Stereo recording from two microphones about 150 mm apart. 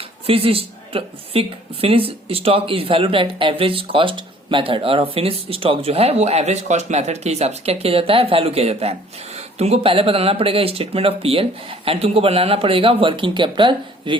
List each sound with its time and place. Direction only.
0.3 s a woman's voice: 40° right (ahead or behind)